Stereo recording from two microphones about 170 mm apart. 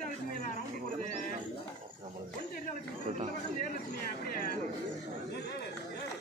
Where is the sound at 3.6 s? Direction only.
55° left (ahead or behind).